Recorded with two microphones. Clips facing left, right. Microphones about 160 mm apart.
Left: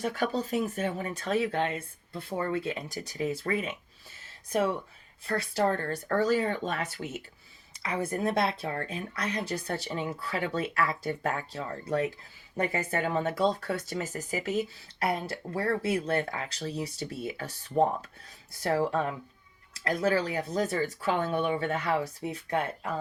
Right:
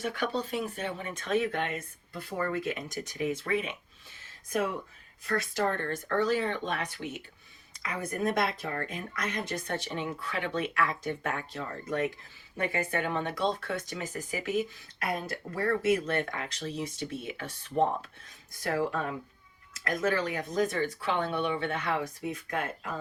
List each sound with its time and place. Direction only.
0.0 s speech: 40° left (ahead or behind)
5.2 s speech: 30° left (ahead or behind)
7.8 s speech: 30° left (ahead or behind)